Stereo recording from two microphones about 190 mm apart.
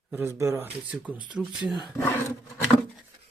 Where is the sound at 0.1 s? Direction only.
15° right (ahead or behind).